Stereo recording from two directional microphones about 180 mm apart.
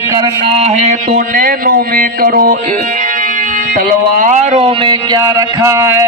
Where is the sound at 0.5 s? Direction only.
35° right (ahead or behind).